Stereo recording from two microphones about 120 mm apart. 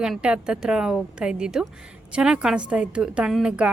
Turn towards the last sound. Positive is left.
turn(degrees=-10)  # may be behind; listen again after turning